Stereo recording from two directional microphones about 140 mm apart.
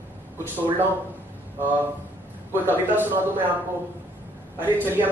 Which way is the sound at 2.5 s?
15° right (ahead or behind).